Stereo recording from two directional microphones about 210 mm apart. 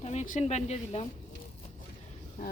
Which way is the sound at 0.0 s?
35° left (ahead or behind).